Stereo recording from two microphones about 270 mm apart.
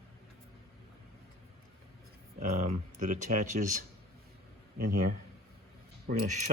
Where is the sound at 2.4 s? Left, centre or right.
Right.